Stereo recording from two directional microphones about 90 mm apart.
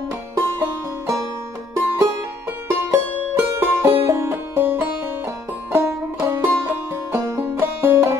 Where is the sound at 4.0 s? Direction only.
25° right (ahead or behind).